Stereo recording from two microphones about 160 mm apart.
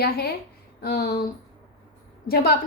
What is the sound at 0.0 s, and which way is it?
A woman's voice, 80° left.